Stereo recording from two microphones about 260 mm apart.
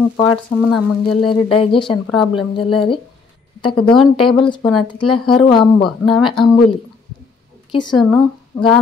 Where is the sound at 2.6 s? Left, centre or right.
Centre.